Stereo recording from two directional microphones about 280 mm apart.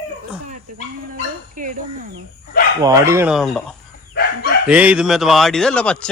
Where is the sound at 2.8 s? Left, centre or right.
Centre.